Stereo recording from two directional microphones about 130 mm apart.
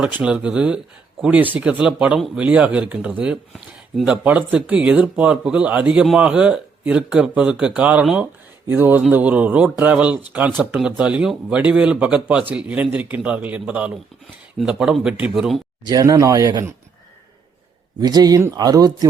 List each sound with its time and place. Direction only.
0.0 s speech: 10° right (ahead or behind)
15.8 s speech: 30° right (ahead or behind)
18.0 s speech: 30° right (ahead or behind)